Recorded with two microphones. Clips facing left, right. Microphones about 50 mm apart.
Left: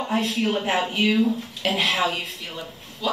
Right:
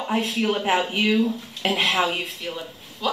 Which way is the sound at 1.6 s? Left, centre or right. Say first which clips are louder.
Right 1 dB; right.